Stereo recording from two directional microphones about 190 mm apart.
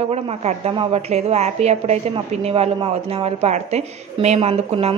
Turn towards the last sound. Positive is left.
turn(degrees=-30)  # may be behind; listen again after turning